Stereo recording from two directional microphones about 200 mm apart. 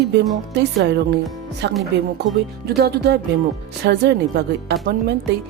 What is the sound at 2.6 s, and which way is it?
Speech, 55° right (ahead or behind).